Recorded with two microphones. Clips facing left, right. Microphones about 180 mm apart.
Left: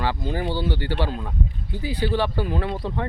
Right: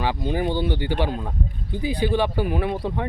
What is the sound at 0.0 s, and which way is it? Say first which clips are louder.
Speech: right 2 dB; 15° right (ahead or behind).